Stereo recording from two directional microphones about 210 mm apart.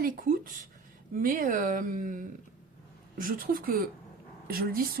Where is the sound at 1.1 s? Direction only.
40° right (ahead or behind).